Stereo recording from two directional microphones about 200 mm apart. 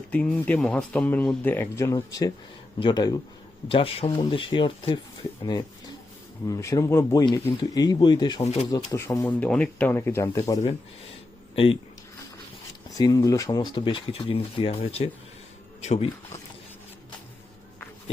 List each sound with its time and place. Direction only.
0.1 s speech: 5° left (ahead or behind); by 11.8 s 25° left (ahead or behind)
13.0 s speech: 20° left (ahead or behind); by 16.0 s 35° left (ahead or behind)